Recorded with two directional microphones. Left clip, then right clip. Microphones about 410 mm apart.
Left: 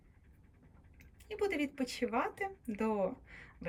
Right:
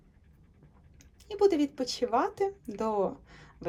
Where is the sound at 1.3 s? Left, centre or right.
Centre.